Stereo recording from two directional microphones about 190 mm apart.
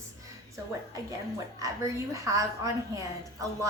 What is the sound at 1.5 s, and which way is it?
A woman's voice, 15° right (ahead or behind).